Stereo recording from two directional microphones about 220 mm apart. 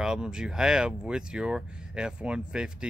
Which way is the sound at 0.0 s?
5° right (ahead or behind).